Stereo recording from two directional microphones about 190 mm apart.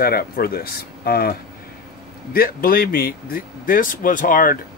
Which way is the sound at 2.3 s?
50° left (ahead or behind).